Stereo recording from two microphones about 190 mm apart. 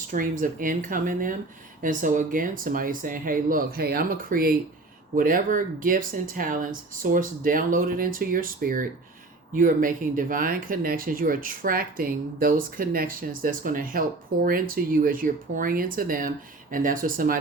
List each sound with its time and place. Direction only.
0.1 s speech: 45° right (ahead or behind)